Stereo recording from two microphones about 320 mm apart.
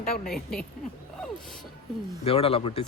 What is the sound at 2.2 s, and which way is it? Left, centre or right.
Speech, centre.